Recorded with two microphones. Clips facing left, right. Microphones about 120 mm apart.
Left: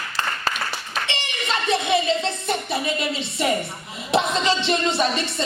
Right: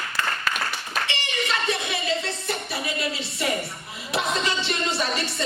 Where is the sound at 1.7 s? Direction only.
25° left (ahead or behind).